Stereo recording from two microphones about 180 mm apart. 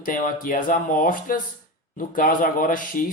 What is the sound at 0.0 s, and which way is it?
Speech, 50° left (ahead or behind).